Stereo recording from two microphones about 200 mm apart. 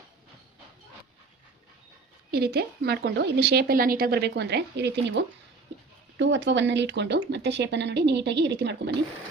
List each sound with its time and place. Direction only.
2.3 s a woman's voice: 50° right (ahead or behind)